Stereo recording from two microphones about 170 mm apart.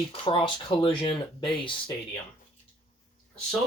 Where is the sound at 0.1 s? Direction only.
30° left (ahead or behind).